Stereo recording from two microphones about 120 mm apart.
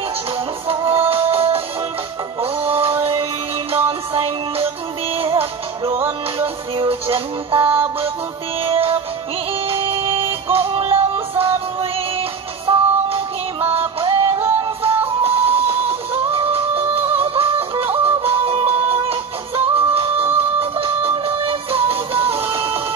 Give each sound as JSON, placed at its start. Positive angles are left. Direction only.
{"t": 0.7, "sound": "music", "side_deg": -50}